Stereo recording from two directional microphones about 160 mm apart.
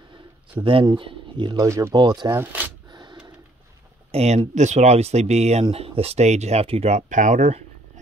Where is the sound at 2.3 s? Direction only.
10° right (ahead or behind).